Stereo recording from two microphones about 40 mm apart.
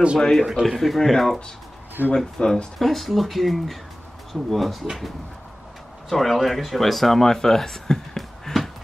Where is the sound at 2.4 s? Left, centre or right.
Centre.